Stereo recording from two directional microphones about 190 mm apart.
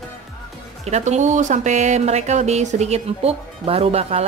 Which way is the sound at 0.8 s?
35° right (ahead or behind).